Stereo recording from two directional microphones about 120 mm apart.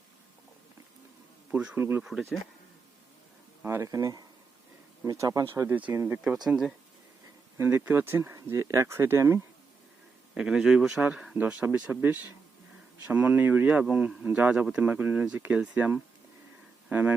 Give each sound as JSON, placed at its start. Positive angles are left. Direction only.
{"t": 1.5, "sound": "speech", "side_deg": -10}
{"t": 3.7, "sound": "speech", "side_deg": -25}
{"t": 6.2, "sound": "speech", "side_deg": -5}
{"t": 7.6, "sound": "speech", "side_deg": -20}
{"t": 10.3, "sound": "speech", "side_deg": -5}
{"t": 11.3, "sound": "speech", "side_deg": -15}